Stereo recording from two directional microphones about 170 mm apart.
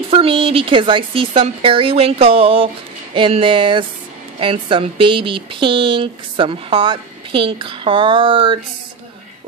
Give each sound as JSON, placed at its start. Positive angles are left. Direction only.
{"t": 0.1, "sound": "speech", "side_deg": -35}